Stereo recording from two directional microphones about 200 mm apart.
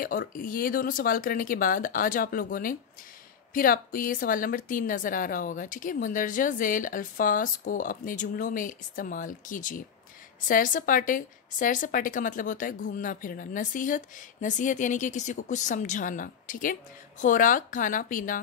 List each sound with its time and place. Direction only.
0.3 s a woman's voice: 45° left (ahead or behind)